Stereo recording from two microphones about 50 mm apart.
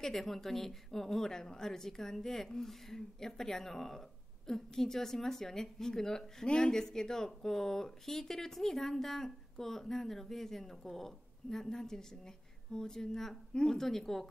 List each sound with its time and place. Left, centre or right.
0.0 s speech: centre